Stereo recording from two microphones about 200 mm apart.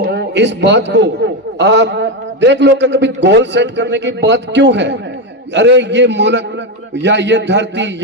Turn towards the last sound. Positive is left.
turn(degrees=-60)  # may be behind; listen again after turning